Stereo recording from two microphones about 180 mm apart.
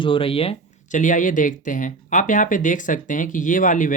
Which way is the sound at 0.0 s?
30° left (ahead or behind).